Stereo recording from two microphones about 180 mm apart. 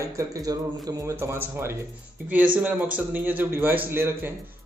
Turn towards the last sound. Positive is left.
turn(degrees=-10)  # may be behind; listen again after turning